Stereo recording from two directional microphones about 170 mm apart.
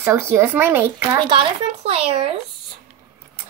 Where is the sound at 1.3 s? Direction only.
35° right (ahead or behind).